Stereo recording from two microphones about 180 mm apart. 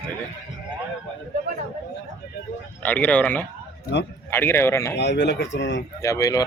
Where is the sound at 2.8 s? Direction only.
10° left (ahead or behind).